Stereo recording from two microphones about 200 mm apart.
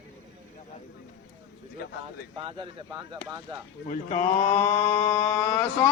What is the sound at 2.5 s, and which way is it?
Speech, 25° right (ahead or behind).